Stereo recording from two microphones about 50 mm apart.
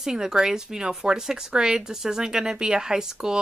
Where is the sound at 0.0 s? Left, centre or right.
Centre.